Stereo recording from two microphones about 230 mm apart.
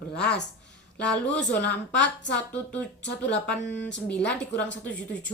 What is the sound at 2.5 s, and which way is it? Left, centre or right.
A woman's voice, centre.